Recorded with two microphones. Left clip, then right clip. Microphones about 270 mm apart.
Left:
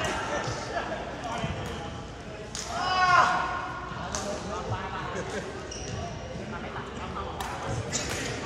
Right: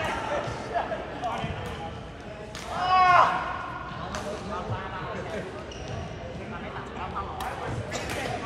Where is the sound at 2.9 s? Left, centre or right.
Centre.